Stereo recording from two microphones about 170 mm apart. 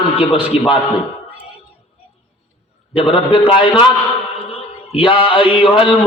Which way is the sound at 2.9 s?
30° left (ahead or behind).